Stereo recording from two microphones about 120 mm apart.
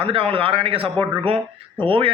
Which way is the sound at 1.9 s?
45° right (ahead or behind).